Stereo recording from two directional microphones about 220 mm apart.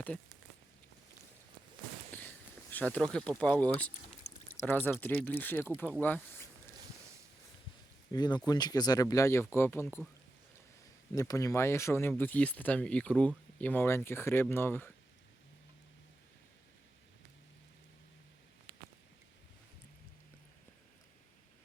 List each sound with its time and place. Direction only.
2.1 s speech: 10° left (ahead or behind)
8.1 s speech: 20° left (ahead or behind)
11.1 s speech: 15° left (ahead or behind)